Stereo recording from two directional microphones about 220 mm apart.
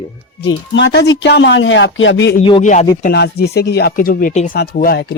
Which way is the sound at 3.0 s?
45° left (ahead or behind).